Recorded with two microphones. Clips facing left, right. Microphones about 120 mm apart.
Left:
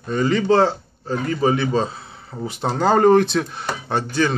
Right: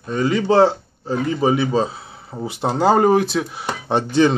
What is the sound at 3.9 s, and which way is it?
Speech, 20° right (ahead or behind).